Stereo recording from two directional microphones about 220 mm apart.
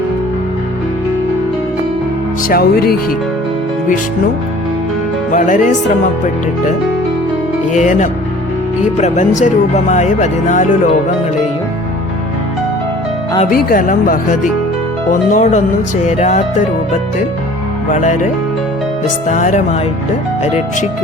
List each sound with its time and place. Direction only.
2.5 s speech: 45° left (ahead or behind)
5.3 s speech: 35° left (ahead or behind)
7.7 s speech: 35° left (ahead or behind)
13.5 s speech: 40° left (ahead or behind)
19.3 s speech: 35° left (ahead or behind)